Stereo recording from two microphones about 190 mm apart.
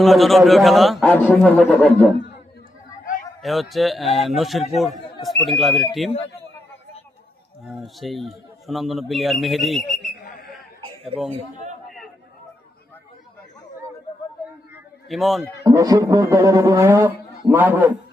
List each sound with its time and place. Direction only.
0.0 s a man's voice: centre (ahead or behind)
3.4 s a man's voice: centre (ahead or behind)
7.9 s a man's voice: centre (ahead or behind)
11.3 s a man's voice: 40° right (ahead or behind)
15.1 s a man's voice: centre (ahead or behind)
15.6 s speech: 20° right (ahead or behind)